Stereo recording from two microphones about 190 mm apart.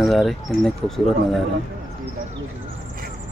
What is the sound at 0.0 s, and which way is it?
Speech, centre (ahead or behind).